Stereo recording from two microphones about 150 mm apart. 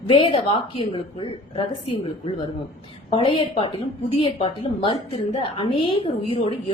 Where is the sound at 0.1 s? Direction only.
40° left (ahead or behind).